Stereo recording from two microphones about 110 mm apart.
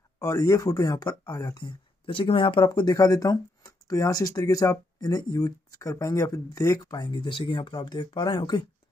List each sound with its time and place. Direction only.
0.2 s speech: 30° left (ahead or behind)